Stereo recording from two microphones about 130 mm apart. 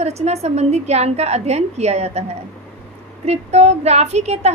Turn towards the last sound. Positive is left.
turn(degrees=-55)  # may be behind; listen again after turning